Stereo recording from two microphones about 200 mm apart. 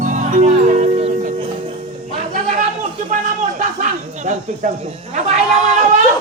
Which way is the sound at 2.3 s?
40° right (ahead or behind).